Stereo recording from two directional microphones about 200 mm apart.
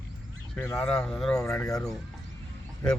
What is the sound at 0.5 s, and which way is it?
Speech, 10° left (ahead or behind).